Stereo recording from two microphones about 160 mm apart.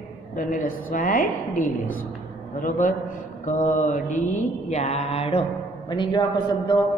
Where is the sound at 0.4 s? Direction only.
60° left (ahead or behind).